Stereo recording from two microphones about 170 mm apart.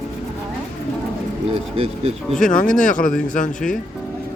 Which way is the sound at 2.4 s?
50° left (ahead or behind).